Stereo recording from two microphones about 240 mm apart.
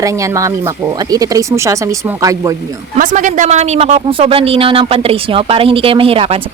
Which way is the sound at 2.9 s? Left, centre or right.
Right.